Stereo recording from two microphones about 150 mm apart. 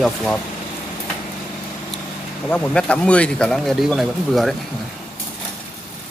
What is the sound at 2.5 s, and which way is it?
Speech, 10° left (ahead or behind).